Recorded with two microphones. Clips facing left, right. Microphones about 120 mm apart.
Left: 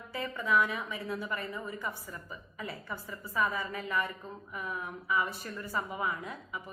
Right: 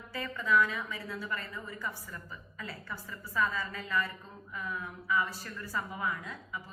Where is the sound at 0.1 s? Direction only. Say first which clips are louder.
Even; 20° left (ahead or behind).